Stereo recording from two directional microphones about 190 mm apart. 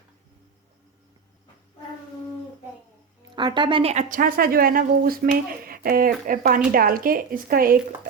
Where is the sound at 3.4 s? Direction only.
25° right (ahead or behind).